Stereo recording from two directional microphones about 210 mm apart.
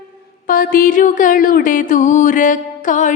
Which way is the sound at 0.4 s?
40° left (ahead or behind).